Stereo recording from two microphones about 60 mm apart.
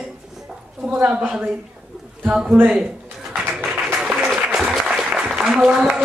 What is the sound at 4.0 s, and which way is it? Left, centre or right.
Applause, centre.